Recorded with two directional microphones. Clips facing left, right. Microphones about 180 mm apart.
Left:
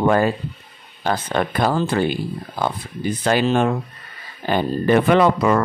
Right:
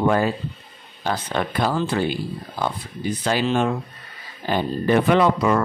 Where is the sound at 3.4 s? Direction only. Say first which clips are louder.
Left 3 dB; 50° left (ahead or behind).